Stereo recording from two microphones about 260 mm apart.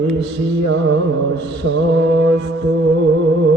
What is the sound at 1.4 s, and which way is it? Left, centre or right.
Mantra, right.